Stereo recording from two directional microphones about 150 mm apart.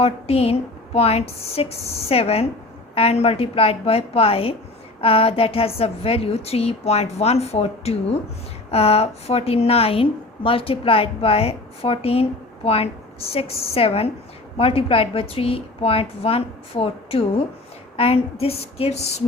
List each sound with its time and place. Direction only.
0.0 s a woman's voice: 40° left (ahead or behind)